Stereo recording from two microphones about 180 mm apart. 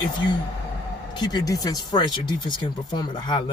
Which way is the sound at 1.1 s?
25° left (ahead or behind).